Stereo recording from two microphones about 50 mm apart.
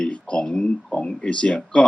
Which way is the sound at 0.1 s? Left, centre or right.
Left.